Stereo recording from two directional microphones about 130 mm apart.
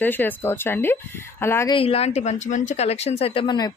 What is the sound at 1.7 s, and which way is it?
A woman's voice, 50° left (ahead or behind).